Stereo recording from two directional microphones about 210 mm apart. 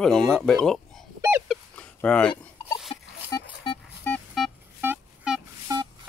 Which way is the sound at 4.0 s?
10° left (ahead or behind).